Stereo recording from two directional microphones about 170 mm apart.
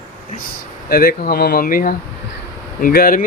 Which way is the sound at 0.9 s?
60° left (ahead or behind).